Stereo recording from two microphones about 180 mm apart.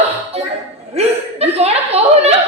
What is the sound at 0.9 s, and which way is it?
Chuckle, 35° right (ahead or behind).